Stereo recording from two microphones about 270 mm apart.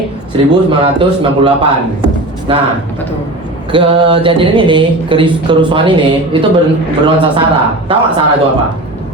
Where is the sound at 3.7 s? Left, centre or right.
Centre.